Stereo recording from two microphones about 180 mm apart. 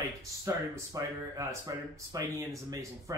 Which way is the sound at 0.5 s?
15° right (ahead or behind).